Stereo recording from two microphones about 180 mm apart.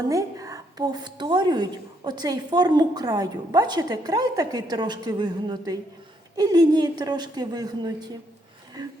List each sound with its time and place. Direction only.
0.1 s a woman's voice: 20° right (ahead or behind)